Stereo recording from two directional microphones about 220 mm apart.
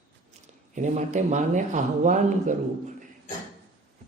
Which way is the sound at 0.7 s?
35° right (ahead or behind).